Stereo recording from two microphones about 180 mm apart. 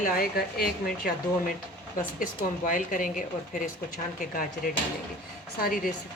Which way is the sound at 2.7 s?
45° left (ahead or behind).